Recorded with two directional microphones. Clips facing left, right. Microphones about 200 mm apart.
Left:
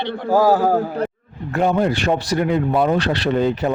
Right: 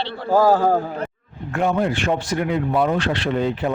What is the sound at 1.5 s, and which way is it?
Speech, 35° left (ahead or behind).